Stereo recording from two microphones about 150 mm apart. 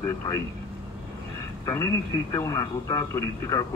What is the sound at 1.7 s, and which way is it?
Speech, 20° left (ahead or behind).